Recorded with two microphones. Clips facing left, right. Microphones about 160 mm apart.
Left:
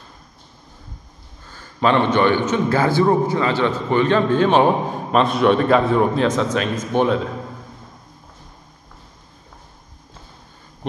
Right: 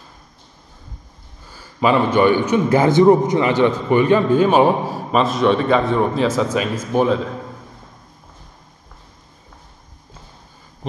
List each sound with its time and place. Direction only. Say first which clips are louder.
1.4 s a man's voice: right 1 dB; 10° right (ahead or behind)